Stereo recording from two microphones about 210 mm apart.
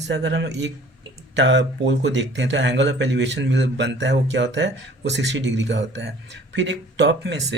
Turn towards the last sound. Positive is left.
turn(degrees=-55)  # may be behind; listen again after turning